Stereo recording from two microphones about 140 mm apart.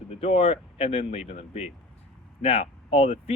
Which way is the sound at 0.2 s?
45° left (ahead or behind).